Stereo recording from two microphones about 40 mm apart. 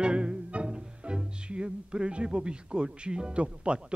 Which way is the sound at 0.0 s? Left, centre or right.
Right.